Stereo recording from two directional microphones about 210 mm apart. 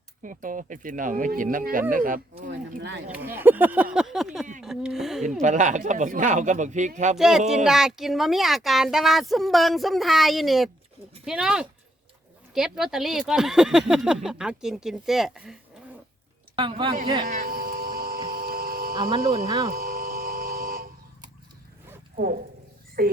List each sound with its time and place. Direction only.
0.2 s speech: 40° right (ahead or behind)
2.7 s speech: 55° right (ahead or behind)
3.1 s speech: 10° right (ahead or behind)
5.4 s speech: 35° right (ahead or behind)
7.2 s speech: centre (ahead or behind)
16.6 s speech: 25° right (ahead or behind)
17.2 s hum: 40° right (ahead or behind)
19.5 s speech: 20° right (ahead or behind)
19.7 s a sound: 45° right (ahead or behind)
22.1 s speech: 40° right (ahead or behind)